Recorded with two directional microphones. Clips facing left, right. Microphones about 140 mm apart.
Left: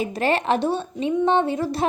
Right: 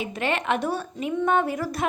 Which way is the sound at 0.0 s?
35° left (ahead or behind).